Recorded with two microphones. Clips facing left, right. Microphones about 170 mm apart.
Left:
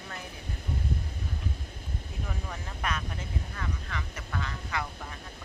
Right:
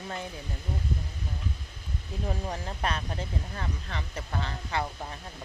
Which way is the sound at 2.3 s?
35° right (ahead or behind).